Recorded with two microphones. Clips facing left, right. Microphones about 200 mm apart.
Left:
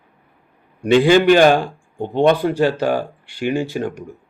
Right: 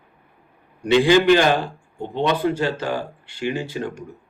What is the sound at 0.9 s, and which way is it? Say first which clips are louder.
Speech: left 3 dB; 50° left (ahead or behind).